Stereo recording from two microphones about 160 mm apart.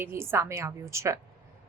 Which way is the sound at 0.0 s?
15° right (ahead or behind).